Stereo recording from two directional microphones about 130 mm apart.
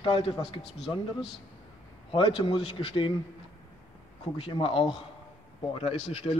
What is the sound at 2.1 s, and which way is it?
Speech, 40° left (ahead or behind).